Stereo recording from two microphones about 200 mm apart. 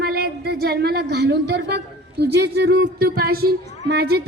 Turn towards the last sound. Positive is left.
turn(degrees=-55)  # may be behind; listen again after turning